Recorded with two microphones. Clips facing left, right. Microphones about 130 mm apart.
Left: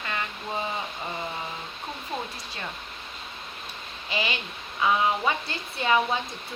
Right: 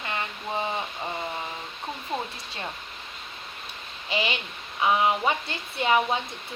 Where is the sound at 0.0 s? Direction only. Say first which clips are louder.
Even; 25° right (ahead or behind).